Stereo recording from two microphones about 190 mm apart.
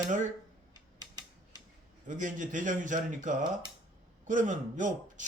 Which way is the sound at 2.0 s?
45° right (ahead or behind).